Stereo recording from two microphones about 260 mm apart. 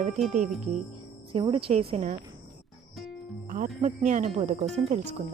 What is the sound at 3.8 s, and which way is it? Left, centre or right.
Speech, right.